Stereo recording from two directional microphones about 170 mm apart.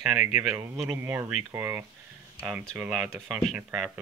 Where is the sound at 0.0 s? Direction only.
5° right (ahead or behind).